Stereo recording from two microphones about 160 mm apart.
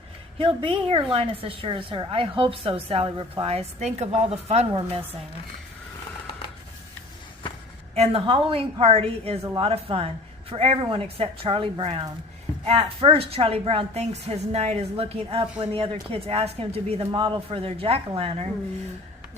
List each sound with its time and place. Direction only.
0.3 s a woman's voice: 35° right (ahead or behind)
7.9 s a woman's voice: 40° right (ahead or behind)